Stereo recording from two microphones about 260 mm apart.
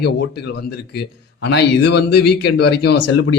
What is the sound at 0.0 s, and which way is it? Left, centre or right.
Speech, left.